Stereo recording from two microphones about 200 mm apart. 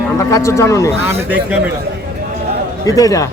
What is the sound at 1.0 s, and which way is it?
Speech, 10° right (ahead or behind).